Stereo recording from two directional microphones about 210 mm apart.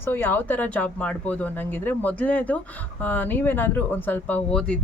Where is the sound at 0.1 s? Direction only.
10° left (ahead or behind).